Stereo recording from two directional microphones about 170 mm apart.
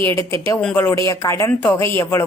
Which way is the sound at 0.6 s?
10° left (ahead or behind).